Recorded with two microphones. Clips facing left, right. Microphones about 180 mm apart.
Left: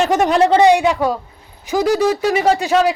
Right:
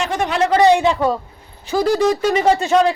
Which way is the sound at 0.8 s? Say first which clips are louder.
Even; 5° left (ahead or behind).